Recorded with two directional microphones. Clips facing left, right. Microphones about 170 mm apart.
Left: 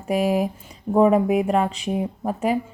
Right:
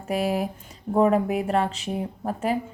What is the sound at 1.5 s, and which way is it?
Speech, 35° right (ahead or behind).